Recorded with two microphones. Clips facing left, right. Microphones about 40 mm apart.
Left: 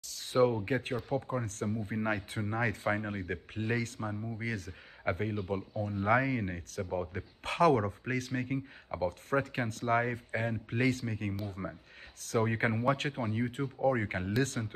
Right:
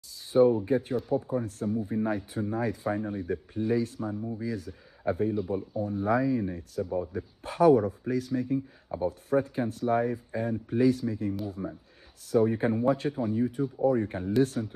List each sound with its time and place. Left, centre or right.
0.3 s speech: left
5.0 s speech: left
8.5 s speech: left
9.3 s speech: left
11.6 s speech: left
12.8 s speech: left
13.1 s speech: left